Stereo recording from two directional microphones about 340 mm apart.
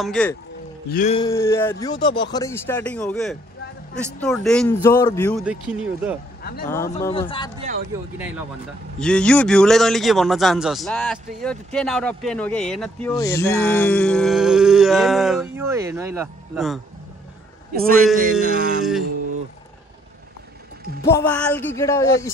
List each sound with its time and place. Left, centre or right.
0.0 s a man's voice: centre
0.9 s a man's voice: centre
6.4 s speech: left
6.7 s speech: centre
8.2 s a man's voice: centre
17.7 s speech: right
21.1 s speech: centre